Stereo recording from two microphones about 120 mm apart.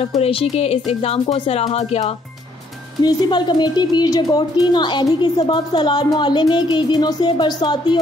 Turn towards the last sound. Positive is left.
turn(degrees=40)  # may be behind; listen again after turning